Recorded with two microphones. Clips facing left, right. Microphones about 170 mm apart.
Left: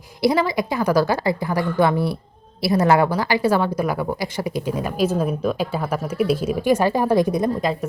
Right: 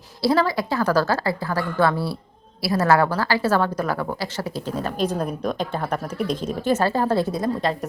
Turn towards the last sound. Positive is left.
turn(degrees=15)  # may be behind; listen again after turning